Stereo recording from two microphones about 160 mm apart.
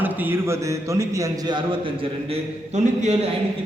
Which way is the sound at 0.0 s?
10° right (ahead or behind).